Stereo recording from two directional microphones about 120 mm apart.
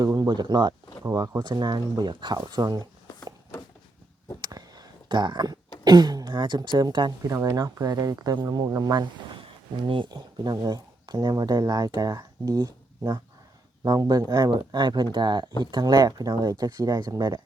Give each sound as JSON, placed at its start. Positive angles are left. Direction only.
{"t": 0.0, "sound": "speech", "side_deg": -35}
{"t": 4.4, "sound": "a sound", "side_deg": -35}
{"t": 5.8, "sound": "speech", "side_deg": -35}
{"t": 9.4, "sound": "speech", "side_deg": -45}